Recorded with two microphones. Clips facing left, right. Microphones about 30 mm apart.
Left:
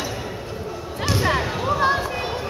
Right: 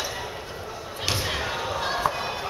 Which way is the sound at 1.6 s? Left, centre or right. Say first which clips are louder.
Left 8 dB; left.